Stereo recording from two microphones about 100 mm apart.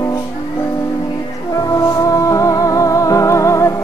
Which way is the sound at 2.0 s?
35° left (ahead or behind).